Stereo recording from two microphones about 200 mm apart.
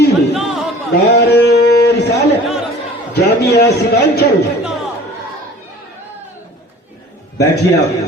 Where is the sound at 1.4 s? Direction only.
55° left (ahead or behind).